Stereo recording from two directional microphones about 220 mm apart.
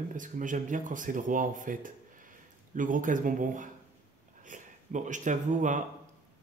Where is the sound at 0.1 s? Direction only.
35° right (ahead or behind).